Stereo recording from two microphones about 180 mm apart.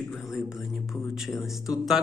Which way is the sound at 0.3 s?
5° right (ahead or behind).